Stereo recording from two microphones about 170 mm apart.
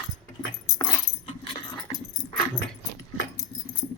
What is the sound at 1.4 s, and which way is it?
Keys jangling, 30° left (ahead or behind).